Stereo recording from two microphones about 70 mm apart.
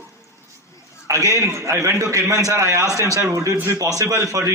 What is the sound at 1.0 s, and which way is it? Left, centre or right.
A man's voice, right.